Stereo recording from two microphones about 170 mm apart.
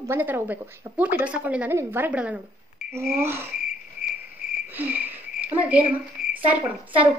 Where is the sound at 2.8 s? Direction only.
55° left (ahead or behind).